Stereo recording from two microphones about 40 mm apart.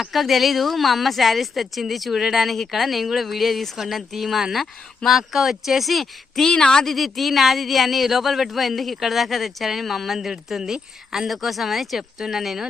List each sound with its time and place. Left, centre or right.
0.0 s speech: centre
6.5 s a woman's voice: centre
6.8 s speech: centre